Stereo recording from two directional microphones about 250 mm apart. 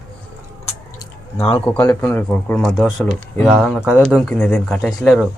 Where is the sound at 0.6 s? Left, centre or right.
Left.